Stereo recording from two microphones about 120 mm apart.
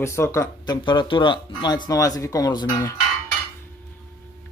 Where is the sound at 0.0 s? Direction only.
25° left (ahead or behind).